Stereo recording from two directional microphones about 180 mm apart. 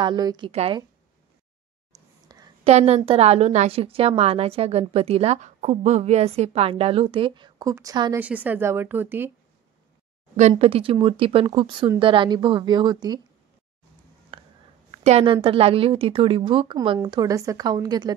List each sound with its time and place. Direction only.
0.0 s a woman's voice: 25° right (ahead or behind)
0.5 s a woman's voice: 35° right (ahead or behind)
1.9 s a sound: 20° right (ahead or behind)
2.6 s a woman's voice: 35° right (ahead or behind); by 8.2 s 20° right (ahead or behind)
8.2 s speech: 10° right (ahead or behind)
10.5 s a woman's voice: 30° right (ahead or behind)
14.3 s a sound: 30° right (ahead or behind)
14.9 s a woman's voice: 35° right (ahead or behind)